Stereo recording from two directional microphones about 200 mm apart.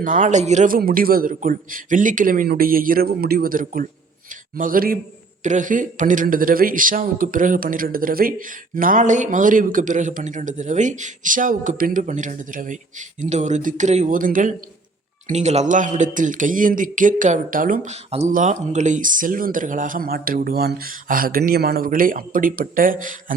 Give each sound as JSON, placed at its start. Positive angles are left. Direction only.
{"t": 0.0, "sound": "a man's voice", "side_deg": -40}